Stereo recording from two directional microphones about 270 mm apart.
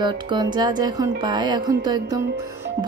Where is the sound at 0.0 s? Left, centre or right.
Centre.